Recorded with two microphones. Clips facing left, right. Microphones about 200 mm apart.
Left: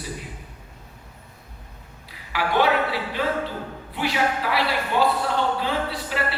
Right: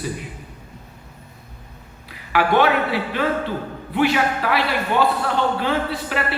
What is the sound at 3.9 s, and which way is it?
A man's voice, 60° right (ahead or behind).